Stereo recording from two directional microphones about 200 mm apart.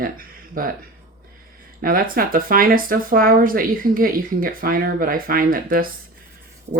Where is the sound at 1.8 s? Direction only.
45° right (ahead or behind).